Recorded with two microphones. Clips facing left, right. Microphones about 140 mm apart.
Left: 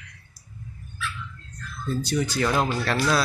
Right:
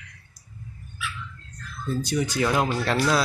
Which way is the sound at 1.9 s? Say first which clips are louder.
Even; 20° right (ahead or behind).